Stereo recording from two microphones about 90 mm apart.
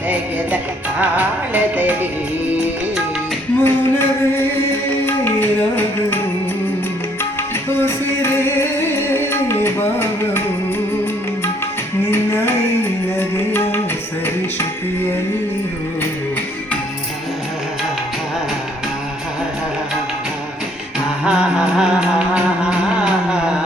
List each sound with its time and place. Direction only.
0.1 s music: 15° right (ahead or behind)
3.6 s a sound: 25° left (ahead or behind)
5.0 s music: 25° left (ahead or behind)
7.7 s music: 25° left (ahead or behind)
12.1 s music: 25° left (ahead or behind)
21.2 s music: 10° right (ahead or behind)